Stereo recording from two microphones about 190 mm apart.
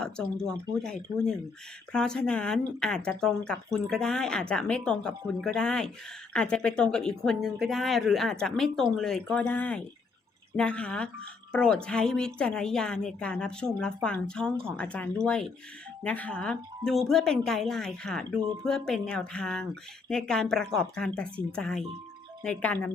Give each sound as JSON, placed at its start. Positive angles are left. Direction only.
{"t": 0.0, "sound": "speech", "side_deg": 5}